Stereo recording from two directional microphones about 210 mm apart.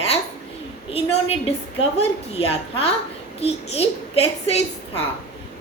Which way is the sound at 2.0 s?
30° left (ahead or behind).